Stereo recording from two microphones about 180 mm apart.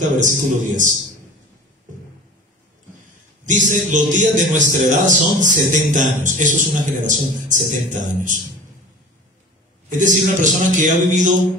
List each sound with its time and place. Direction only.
0.2 s a man's voice: 45° right (ahead or behind)
3.4 s a man's voice: 45° right (ahead or behind)
9.8 s a man's voice: 45° right (ahead or behind)